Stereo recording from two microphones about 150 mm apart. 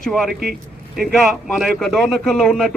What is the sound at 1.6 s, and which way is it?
Speech, centre (ahead or behind).